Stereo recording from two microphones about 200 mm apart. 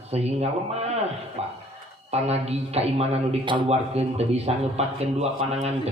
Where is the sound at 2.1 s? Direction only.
30° right (ahead or behind).